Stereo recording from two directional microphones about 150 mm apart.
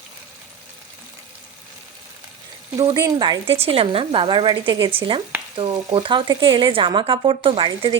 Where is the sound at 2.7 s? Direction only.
25° right (ahead or behind).